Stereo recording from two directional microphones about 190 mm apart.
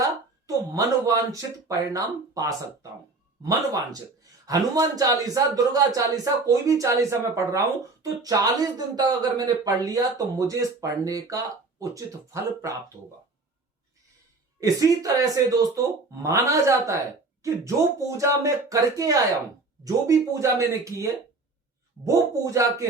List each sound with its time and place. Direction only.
0.0 s a man's voice: 15° right (ahead or behind)
14.6 s a man's voice: 20° right (ahead or behind)
18.2 s a man's voice: 15° right (ahead or behind)